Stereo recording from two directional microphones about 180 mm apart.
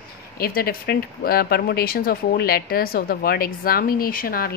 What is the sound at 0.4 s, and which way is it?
Speech, 55° left (ahead or behind).